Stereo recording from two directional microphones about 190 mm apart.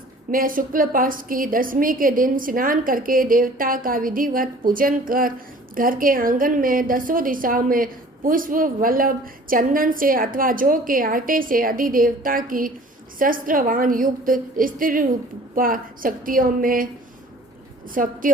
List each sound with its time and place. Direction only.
0.3 s a woman's voice: 45° right (ahead or behind)